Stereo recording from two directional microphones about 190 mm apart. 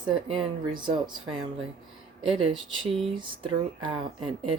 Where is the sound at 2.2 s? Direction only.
30° right (ahead or behind).